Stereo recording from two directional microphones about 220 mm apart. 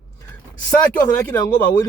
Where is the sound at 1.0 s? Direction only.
10° left (ahead or behind).